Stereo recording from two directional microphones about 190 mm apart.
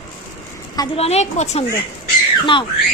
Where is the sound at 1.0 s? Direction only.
35° left (ahead or behind).